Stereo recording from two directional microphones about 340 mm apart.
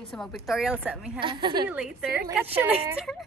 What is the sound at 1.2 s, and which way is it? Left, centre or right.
Speech, centre.